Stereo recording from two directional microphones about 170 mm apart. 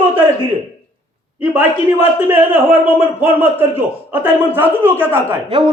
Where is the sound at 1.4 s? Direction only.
10° right (ahead or behind).